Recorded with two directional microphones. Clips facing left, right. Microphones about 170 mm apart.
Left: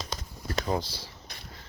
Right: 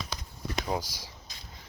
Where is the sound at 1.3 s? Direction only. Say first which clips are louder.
Left 4 dB; 60° left (ahead or behind).